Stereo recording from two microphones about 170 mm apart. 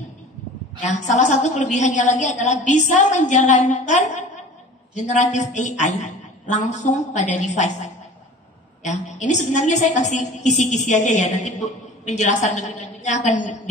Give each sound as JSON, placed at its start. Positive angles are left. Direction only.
{"t": 0.8, "sound": "a woman's voice", "side_deg": 45}